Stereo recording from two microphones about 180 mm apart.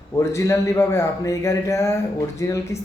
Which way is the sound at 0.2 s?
15° left (ahead or behind).